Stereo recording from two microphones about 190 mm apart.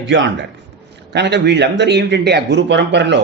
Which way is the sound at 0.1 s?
75° right (ahead or behind).